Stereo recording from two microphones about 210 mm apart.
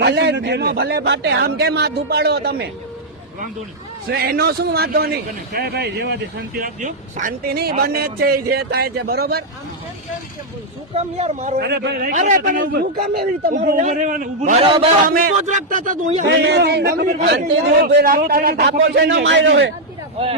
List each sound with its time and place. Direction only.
0.0 s a man's voice: 55° right (ahead or behind)
4.1 s a man's voice: 50° right (ahead or behind)
10.9 s a man's voice: 30° right (ahead or behind)
11.6 s a man's voice: 50° right (ahead or behind)
14.6 s a man's voice: 25° right (ahead or behind)
15.0 s a man's voice: 40° right (ahead or behind)
16.2 s a man's voice: 55° right (ahead or behind)